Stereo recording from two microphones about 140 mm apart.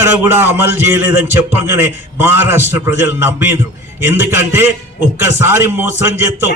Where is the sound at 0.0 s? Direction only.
15° right (ahead or behind).